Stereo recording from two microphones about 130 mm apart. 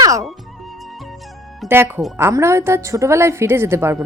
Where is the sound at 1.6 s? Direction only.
15° right (ahead or behind).